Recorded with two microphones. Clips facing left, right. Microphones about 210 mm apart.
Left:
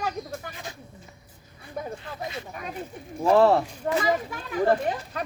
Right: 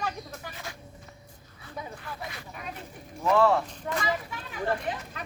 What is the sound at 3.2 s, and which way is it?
A child's voice, 35° left (ahead or behind).